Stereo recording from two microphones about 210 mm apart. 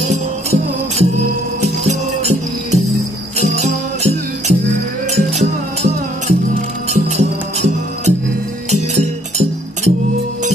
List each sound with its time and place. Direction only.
0.1 s music: 30° right (ahead or behind)